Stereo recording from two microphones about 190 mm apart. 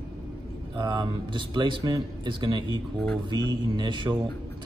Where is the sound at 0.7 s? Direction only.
20° right (ahead or behind).